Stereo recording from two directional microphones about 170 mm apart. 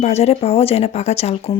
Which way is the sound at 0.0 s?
40° left (ahead or behind).